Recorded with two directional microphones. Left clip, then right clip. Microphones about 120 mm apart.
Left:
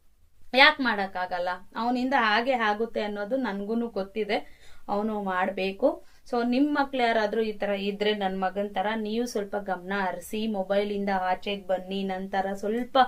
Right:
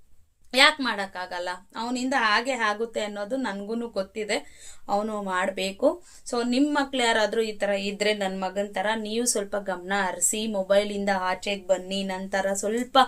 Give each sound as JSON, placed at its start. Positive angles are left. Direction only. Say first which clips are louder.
{"t": 0.5, "sound": "a woman's voice", "louder": "even", "side_deg": -25}